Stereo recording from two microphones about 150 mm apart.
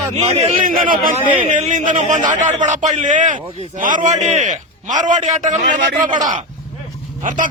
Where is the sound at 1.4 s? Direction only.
55° right (ahead or behind).